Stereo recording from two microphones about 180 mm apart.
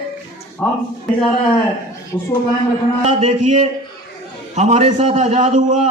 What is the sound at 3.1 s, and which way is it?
A man's voice, 40° right (ahead or behind).